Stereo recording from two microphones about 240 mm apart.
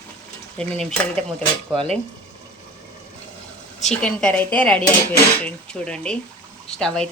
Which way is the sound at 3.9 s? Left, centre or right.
Centre.